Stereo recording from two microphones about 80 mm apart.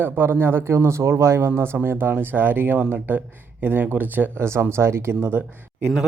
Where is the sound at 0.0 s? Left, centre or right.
Right.